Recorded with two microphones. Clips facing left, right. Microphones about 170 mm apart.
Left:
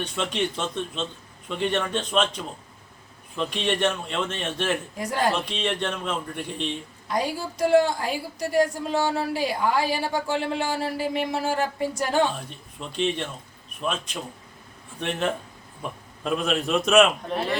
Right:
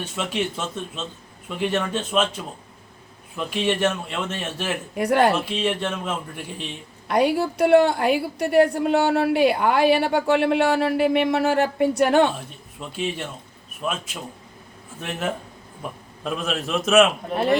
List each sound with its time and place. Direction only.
0.0 s a man's voice: 5° right (ahead or behind)
4.9 s a woman's voice: 65° right (ahead or behind)
5.3 s a man's voice: 5° right (ahead or behind)
7.1 s a woman's voice: 65° right (ahead or behind)
12.8 s a man's voice: 5° right (ahead or behind)
16.2 s a man's voice: centre (ahead or behind)